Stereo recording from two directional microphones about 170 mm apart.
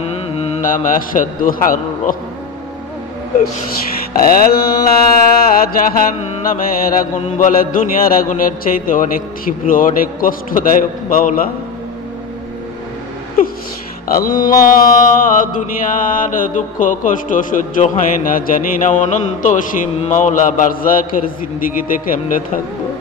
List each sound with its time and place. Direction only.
0.0 s mantra: 35° left (ahead or behind)
0.6 s mantra: 55° left (ahead or behind)
4.1 s mantra: 60° left (ahead or behind)
14.0 s mantra: 55° left (ahead or behind)